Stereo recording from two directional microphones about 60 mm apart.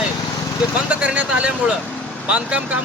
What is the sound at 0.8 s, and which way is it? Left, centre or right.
Speech, right.